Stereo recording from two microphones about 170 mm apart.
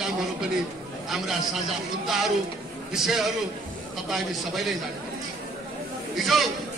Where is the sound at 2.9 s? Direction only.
Centre (ahead or behind).